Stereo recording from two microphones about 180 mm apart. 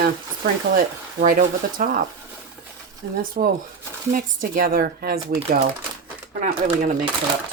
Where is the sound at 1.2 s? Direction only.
50° right (ahead or behind).